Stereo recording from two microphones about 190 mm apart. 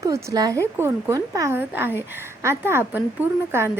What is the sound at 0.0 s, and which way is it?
A woman's voice, 15° right (ahead or behind).